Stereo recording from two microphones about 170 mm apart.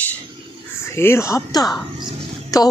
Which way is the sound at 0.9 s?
15° left (ahead or behind).